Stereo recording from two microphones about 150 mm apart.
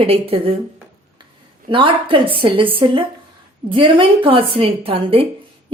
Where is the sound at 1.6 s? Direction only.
35° right (ahead or behind).